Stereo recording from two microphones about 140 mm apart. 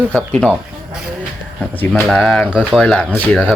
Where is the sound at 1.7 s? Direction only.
15° left (ahead or behind).